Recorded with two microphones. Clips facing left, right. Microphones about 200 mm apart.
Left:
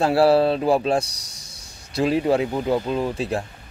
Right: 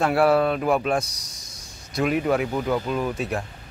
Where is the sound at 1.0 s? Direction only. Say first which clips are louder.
Even; 65° left (ahead or behind).